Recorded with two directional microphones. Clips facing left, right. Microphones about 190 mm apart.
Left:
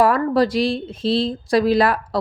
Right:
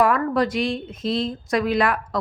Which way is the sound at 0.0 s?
35° left (ahead or behind).